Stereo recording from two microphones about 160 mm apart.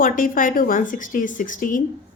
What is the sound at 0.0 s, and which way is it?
A woman's voice, 60° left (ahead or behind).